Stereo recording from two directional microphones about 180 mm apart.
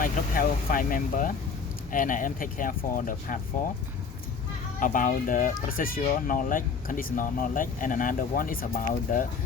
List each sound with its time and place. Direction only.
0.0 s speech: 50° left (ahead or behind)
4.8 s speech: 50° left (ahead or behind)